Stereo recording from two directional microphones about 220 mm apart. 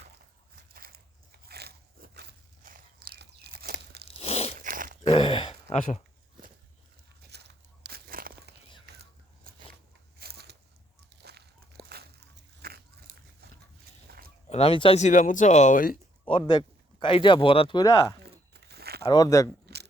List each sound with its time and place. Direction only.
0.7 s biting: 45° right (ahead or behind)
4.2 s biting: 30° left (ahead or behind)
4.6 s a sound: 40° right (ahead or behind)
5.0 s a sound: 25° left (ahead or behind)
7.3 s a sound: 50° right (ahead or behind)
10.2 s crunch: 45° right (ahead or behind)
11.2 s a sound: 50° right (ahead or behind)
14.1 s fowl: 45° right (ahead or behind)
14.5 s speech: 25° left (ahead or behind)
16.5 s speech: 20° left (ahead or behind)
18.5 s crumpling: 45° right (ahead or behind)
19.0 s speech: 15° left (ahead or behind)
19.7 s gears: 50° right (ahead or behind)